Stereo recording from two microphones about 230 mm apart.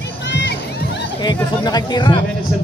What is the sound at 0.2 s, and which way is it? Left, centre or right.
Crowd, left.